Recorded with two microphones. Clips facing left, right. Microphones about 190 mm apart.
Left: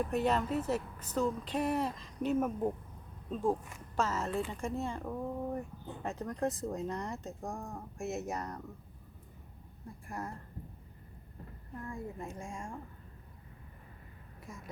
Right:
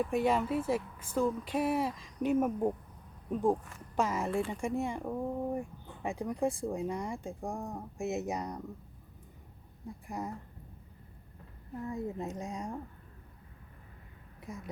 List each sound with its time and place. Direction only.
0.0 s speech: 10° right (ahead or behind)
9.8 s speech: 15° right (ahead or behind)
11.9 s speech: 20° right (ahead or behind)